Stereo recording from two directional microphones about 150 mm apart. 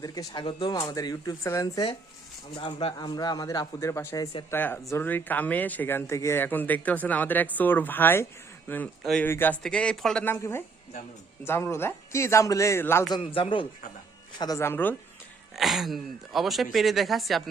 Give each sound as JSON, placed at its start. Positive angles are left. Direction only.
{"t": 0.0, "sound": "speech", "side_deg": 25}
{"t": 13.1, "sound": "a man's voice", "side_deg": 35}
{"t": 15.5, "sound": "speech", "side_deg": 0}